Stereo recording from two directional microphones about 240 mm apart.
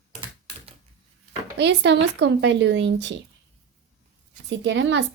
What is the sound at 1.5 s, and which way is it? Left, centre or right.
Speech, right.